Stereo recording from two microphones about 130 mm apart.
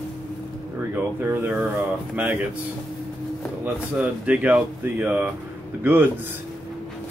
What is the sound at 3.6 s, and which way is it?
Speech, 10° right (ahead or behind).